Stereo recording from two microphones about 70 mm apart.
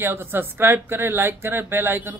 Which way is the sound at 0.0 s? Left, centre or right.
Right.